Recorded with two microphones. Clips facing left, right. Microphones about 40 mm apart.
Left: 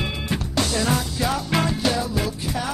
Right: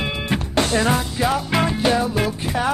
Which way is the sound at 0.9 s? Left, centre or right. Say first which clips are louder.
Right 3 dB; centre.